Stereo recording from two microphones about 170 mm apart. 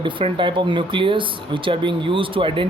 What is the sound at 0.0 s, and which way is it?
Speech, 30° right (ahead or behind).